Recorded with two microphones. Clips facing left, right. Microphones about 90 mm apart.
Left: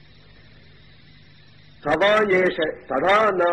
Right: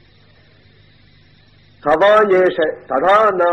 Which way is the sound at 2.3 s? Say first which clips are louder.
Right 7 dB; 60° right (ahead or behind).